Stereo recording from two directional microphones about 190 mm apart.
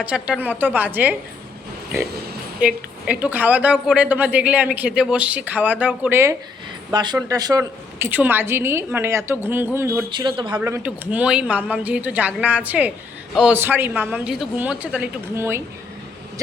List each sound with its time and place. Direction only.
0.0 s a woman's voice: 5° right (ahead or behind)
2.6 s a woman's voice: 5° right (ahead or behind)
6.9 s a woman's voice: 20° right (ahead or behind)
10.1 s speech: 25° right (ahead or behind)
10.6 s a woman's voice: 10° right (ahead or behind)